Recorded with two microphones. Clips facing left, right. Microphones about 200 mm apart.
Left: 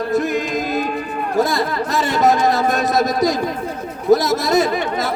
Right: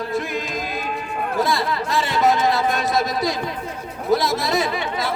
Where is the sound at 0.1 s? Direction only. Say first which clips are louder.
Left 6 dB; 45° left (ahead or behind).